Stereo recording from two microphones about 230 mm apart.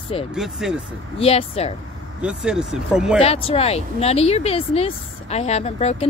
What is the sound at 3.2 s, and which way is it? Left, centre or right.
Speech, left.